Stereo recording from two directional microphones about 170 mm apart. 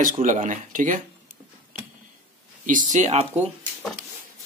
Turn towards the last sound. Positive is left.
turn(degrees=-40)  # may be behind; listen again after turning